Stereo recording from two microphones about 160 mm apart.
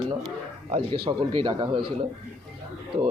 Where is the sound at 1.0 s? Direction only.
30° right (ahead or behind).